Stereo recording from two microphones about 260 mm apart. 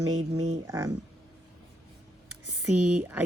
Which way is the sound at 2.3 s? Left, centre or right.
Right.